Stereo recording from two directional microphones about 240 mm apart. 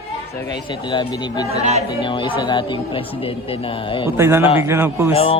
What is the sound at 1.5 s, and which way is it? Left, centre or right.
Speech, right.